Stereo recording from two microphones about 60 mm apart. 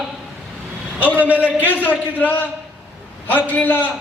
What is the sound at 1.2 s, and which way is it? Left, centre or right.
Speech, right.